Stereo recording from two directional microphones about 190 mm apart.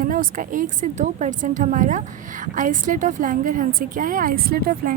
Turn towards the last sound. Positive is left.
turn(degrees=-50)  # may be behind; listen again after turning